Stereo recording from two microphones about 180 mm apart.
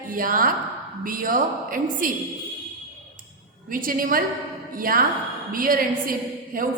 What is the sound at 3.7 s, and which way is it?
A woman's voice, 50° right (ahead or behind).